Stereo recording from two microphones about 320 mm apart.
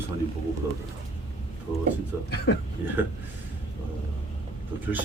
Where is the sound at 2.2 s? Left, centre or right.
Left.